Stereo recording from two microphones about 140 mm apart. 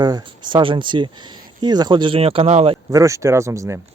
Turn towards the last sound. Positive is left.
turn(degrees=-20)  # may be behind; listen again after turning